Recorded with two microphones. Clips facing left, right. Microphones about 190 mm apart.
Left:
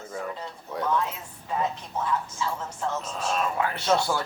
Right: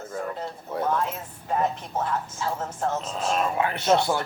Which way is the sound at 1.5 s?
50° right (ahead or behind).